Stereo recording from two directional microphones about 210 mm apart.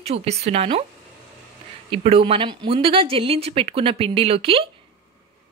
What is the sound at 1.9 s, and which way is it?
Speech, 25° right (ahead or behind).